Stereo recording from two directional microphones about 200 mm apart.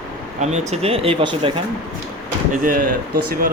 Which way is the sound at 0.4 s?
35° right (ahead or behind).